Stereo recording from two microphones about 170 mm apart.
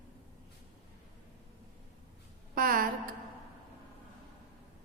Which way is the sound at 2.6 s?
55° right (ahead or behind).